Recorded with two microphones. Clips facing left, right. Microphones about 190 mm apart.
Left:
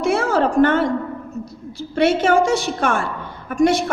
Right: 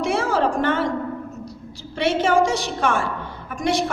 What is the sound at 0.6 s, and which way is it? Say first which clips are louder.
Speech: left 6 dB; 55° left (ahead or behind).